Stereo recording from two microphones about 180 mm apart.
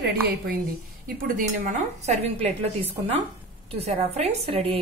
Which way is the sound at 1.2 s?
50° right (ahead or behind).